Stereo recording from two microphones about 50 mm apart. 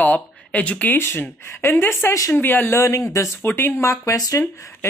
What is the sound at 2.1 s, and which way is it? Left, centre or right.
Speech, left.